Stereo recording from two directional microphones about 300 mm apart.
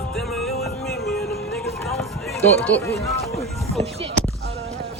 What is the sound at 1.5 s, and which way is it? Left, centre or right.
Run, centre.